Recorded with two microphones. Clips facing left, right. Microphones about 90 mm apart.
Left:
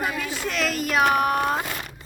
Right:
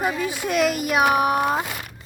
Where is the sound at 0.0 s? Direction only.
15° right (ahead or behind).